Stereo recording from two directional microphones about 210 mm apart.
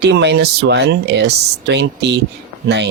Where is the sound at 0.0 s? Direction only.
55° right (ahead or behind).